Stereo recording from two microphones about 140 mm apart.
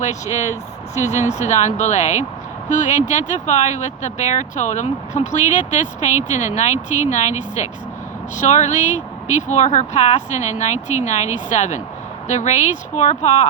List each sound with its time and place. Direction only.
0.0 s speech: 60° left (ahead or behind)